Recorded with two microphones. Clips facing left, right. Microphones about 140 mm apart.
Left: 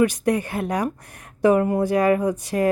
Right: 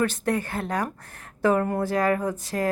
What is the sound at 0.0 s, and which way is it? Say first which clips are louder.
Speech: left 5 dB; 15° left (ahead or behind).